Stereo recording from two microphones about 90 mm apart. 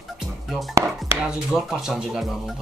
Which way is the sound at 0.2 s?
Centre (ahead or behind).